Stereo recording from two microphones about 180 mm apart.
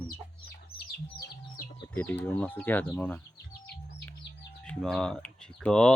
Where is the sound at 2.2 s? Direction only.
10° left (ahead or behind).